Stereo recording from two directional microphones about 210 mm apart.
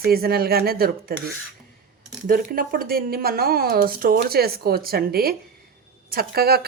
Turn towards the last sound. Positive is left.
turn(degrees=-45)  # may be behind; listen again after turning